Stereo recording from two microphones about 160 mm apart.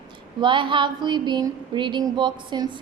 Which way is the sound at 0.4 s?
30° right (ahead or behind).